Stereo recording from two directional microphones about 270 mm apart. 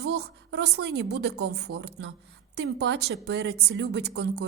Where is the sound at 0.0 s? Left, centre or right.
Right.